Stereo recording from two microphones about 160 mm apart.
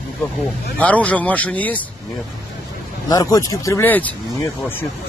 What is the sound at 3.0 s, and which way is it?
Speech, 20° left (ahead or behind).